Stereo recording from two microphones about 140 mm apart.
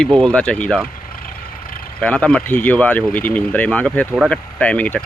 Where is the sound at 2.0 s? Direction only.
10° left (ahead or behind).